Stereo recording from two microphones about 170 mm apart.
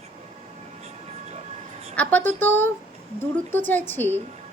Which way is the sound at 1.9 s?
10° left (ahead or behind).